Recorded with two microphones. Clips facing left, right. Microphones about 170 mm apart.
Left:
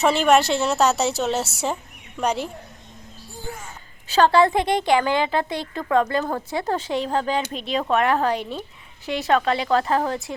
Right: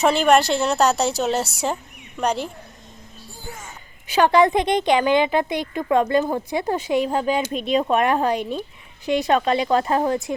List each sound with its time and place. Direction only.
0.0 s a woman's voice: centre (ahead or behind)
4.0 s a woman's voice: 15° right (ahead or behind)